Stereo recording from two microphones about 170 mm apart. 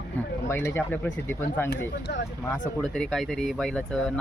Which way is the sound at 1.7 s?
75° left (ahead or behind).